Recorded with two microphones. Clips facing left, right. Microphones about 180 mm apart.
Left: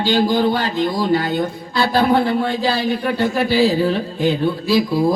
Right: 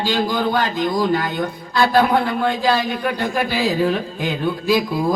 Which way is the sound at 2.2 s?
35° left (ahead or behind).